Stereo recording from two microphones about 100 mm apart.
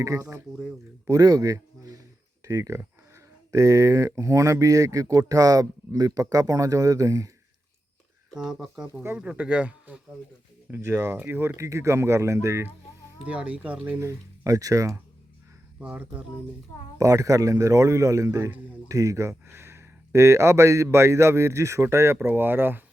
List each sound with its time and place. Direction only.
0.0 s speech: 35° right (ahead or behind)
8.4 s speech: 5° right (ahead or behind)
10.7 s speech: 25° right (ahead or behind)
13.2 s speech: 15° right (ahead or behind)
14.0 s speech: 30° right (ahead or behind)
15.8 s speech: 15° right (ahead or behind)
17.0 s speech: 35° right (ahead or behind)